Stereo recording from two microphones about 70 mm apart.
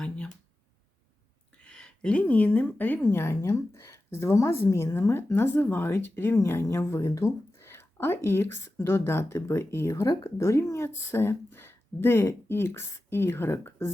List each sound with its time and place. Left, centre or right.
1.6 s a woman's voice: centre; by 13.9 s left